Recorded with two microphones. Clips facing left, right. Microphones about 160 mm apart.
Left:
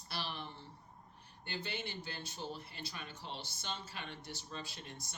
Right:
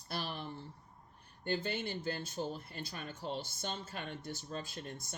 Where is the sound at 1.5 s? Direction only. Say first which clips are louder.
Right 7 dB; 45° right (ahead or behind).